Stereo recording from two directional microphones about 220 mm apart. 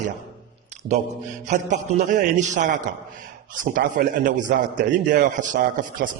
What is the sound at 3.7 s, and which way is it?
A man's voice, 40° right (ahead or behind).